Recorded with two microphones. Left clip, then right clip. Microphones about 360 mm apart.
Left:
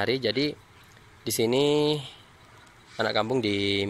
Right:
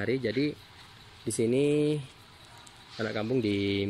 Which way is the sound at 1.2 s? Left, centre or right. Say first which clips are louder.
Left 3 dB; left.